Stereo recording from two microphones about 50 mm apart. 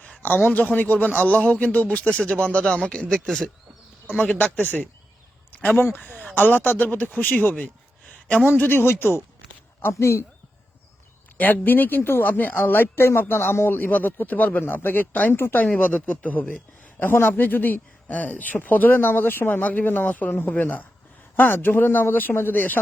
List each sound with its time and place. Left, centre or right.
0.4 s speech: left; by 3.5 s centre
4.2 s speech: left
8.4 s speech: left
11.3 s speech: left
14.6 s speech: left
15.3 s speech: left
15.8 s speech: left
17.2 s speech: left